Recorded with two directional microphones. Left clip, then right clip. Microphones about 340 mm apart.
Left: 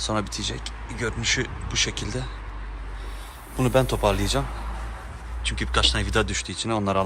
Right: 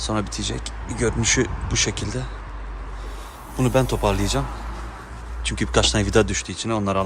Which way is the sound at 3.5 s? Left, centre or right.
Centre.